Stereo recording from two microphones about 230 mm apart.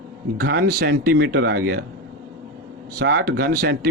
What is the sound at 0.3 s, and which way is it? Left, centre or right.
Speech, right.